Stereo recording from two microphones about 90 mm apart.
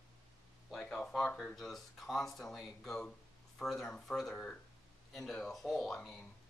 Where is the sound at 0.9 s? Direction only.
5° left (ahead or behind).